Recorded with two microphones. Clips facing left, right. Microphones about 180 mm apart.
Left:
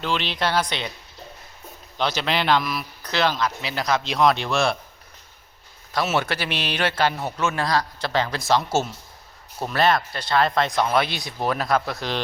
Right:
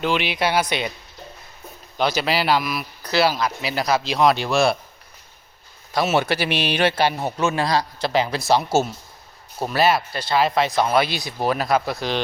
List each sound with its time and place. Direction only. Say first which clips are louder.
0.0 s speech: right 3 dB; 10° right (ahead or behind)
2.0 s speech: right 3 dB; 5° right (ahead or behind)
5.9 s speech: right 3 dB; 15° right (ahead or behind)
7.3 s a man's voice: right 3 dB; 30° right (ahead or behind)
7.8 s speech: right 3 dB; 10° right (ahead or behind)